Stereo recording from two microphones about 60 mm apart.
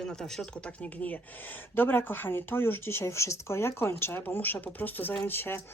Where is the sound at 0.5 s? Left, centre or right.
Left.